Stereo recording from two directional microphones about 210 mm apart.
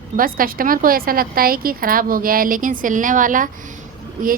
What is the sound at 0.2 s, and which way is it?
A woman's voice, 45° right (ahead or behind).